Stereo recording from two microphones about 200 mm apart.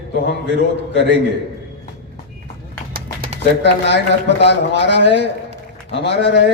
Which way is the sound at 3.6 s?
60° left (ahead or behind).